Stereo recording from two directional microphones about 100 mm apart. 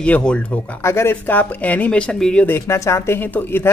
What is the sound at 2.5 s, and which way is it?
Speech, 30° left (ahead or behind).